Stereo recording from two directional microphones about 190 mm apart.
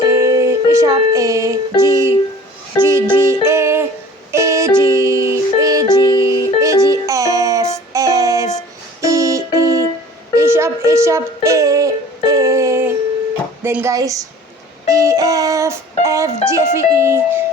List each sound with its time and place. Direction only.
0.0 s music: 15° right (ahead or behind)
1.8 s speech: 15° right (ahead or behind)
2.8 s music: 15° right (ahead or behind)
7.9 s child singing: 15° right (ahead or behind)
9.0 s keyboard: 15° right (ahead or behind)
10.3 s music: 15° right (ahead or behind)
13.6 s a sound: 15° right (ahead or behind)
14.8 s child singing: 15° right (ahead or behind)
16.0 s speech: 15° right (ahead or behind)